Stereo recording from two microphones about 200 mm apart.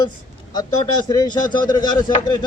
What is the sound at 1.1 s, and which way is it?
A man's voice, 20° left (ahead or behind).